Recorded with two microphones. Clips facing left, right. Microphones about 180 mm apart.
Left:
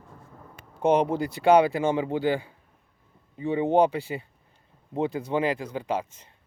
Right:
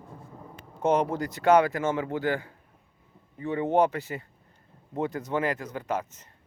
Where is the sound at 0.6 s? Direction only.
15° left (ahead or behind).